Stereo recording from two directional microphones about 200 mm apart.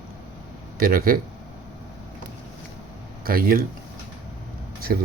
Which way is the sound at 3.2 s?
45° right (ahead or behind).